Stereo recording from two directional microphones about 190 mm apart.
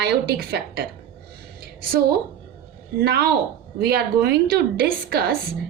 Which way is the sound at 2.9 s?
60° right (ahead or behind).